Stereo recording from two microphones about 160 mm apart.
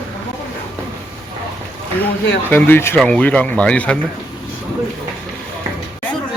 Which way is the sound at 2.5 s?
15° left (ahead or behind).